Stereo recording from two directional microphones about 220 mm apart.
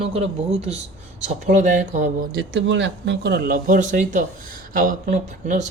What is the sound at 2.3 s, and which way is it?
A man's voice, 55° right (ahead or behind).